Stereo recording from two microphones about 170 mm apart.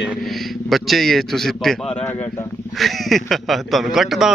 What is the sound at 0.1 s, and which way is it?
A man's voice, centre (ahead or behind).